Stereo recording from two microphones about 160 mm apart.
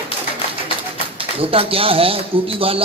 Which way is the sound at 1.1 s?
35° right (ahead or behind).